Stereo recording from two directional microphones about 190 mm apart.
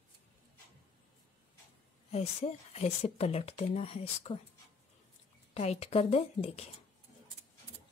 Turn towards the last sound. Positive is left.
turn(degrees=35)  # may be behind; listen again after turning